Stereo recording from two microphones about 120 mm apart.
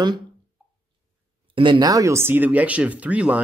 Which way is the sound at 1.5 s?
45° right (ahead or behind).